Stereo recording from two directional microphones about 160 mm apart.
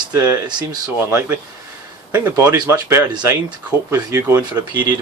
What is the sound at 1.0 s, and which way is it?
Speech, 15° right (ahead or behind).